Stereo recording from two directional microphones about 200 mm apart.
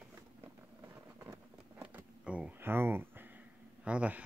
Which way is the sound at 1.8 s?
5° right (ahead or behind).